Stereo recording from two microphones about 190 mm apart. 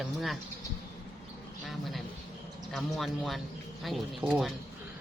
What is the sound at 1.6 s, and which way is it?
Speech, centre (ahead or behind).